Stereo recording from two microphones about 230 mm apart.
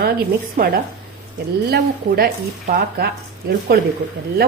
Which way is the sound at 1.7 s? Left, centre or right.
Right.